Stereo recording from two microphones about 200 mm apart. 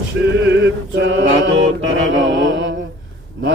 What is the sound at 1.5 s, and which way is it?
Music, 70° right (ahead or behind).